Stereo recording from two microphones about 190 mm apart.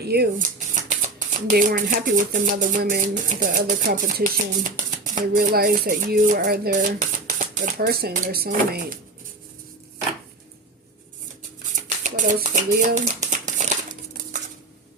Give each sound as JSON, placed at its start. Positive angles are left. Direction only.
{"t": 0.0, "sound": "speech", "side_deg": -55}
{"t": 11.7, "sound": "speech", "side_deg": -45}
{"t": 13.4, "sound": "crumpling", "side_deg": -40}